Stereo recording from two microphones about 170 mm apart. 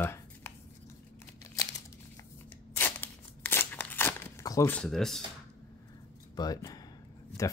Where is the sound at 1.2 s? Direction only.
15° left (ahead or behind).